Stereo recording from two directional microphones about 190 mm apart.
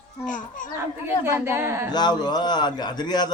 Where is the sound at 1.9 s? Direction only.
20° left (ahead or behind).